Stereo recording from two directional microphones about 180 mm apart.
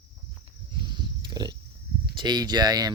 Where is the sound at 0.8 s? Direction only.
25° right (ahead or behind).